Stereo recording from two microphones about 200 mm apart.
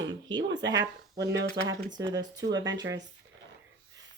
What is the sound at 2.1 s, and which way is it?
Speech, 20° right (ahead or behind).